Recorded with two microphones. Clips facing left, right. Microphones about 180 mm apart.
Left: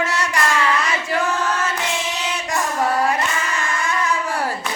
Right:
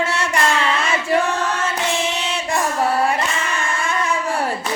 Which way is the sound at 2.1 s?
25° right (ahead or behind).